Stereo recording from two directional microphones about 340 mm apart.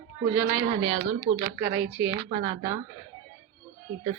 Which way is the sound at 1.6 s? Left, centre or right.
Centre.